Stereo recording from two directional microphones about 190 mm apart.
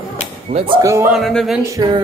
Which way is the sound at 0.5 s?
30° right (ahead or behind).